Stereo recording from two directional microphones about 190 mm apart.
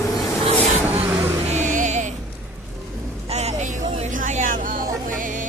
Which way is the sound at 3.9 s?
40° right (ahead or behind).